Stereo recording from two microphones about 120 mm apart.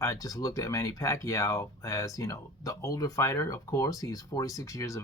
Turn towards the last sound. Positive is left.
turn(degrees=25)  # may be behind; listen again after turning